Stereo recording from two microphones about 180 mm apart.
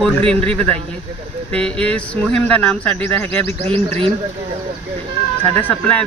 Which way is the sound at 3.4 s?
35° right (ahead or behind).